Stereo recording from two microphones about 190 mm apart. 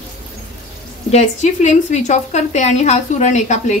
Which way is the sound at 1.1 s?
35° left (ahead or behind).